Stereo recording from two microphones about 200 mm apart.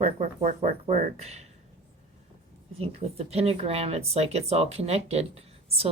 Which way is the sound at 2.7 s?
30° right (ahead or behind).